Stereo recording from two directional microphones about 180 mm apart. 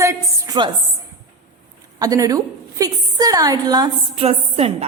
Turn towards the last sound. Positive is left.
turn(degrees=-35)  # may be behind; listen again after turning